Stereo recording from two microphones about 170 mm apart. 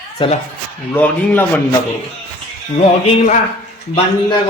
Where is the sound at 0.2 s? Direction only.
30° left (ahead or behind).